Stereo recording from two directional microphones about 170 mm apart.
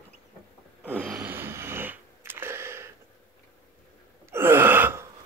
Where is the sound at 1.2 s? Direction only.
10° right (ahead or behind).